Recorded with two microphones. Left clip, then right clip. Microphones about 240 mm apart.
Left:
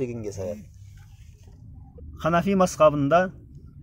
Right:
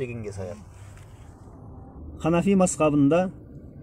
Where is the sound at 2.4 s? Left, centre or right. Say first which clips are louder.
Left 5 dB; left.